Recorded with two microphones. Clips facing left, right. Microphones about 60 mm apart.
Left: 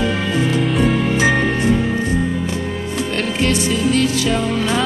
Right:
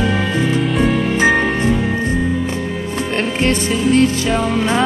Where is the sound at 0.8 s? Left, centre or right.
Centre.